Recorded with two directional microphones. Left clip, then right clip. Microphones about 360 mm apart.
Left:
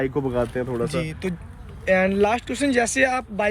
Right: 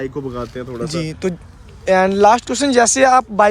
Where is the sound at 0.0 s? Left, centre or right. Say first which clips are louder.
Left 2 dB; centre.